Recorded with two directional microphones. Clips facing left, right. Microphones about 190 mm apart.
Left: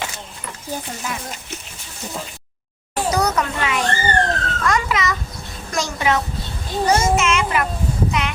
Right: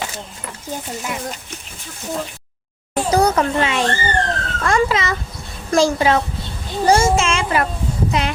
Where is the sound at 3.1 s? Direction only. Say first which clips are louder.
Right 7 dB; 30° right (ahead or behind).